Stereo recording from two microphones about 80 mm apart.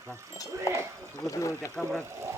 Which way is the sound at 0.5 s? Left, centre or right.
Right.